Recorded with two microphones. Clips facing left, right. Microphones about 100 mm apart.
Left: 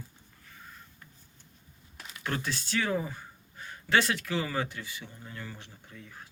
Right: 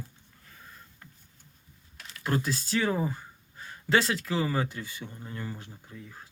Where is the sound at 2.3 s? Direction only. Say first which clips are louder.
Right 4 dB; 35° right (ahead or behind).